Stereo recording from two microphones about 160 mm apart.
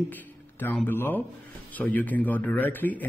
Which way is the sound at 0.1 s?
10° left (ahead or behind).